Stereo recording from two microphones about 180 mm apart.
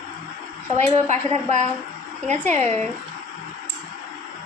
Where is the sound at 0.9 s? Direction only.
40° right (ahead or behind).